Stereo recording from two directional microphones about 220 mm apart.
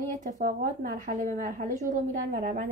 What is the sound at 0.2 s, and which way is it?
A woman's voice, 40° right (ahead or behind).